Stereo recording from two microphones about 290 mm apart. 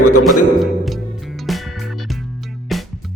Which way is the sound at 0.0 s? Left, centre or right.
Left.